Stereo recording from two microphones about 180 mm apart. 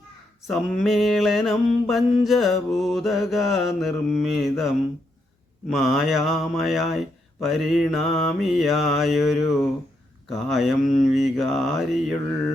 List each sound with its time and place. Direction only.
0.4 s mantra: centre (ahead or behind)